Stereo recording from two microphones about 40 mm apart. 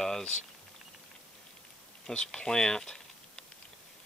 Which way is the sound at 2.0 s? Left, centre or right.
Centre.